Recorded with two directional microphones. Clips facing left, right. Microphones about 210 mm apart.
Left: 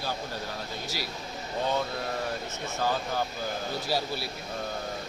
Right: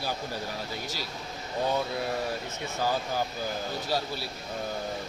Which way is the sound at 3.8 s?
10° left (ahead or behind).